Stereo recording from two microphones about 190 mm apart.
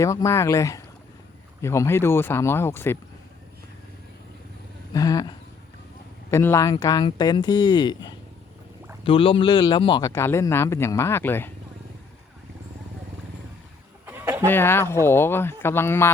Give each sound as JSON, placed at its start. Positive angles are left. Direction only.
{"t": 0.0, "sound": "speech", "side_deg": 15}
{"t": 4.9, "sound": "speech", "side_deg": 20}
{"t": 6.3, "sound": "speech", "side_deg": 15}
{"t": 14.1, "sound": "chicken", "side_deg": -10}
{"t": 14.4, "sound": "speech", "side_deg": 10}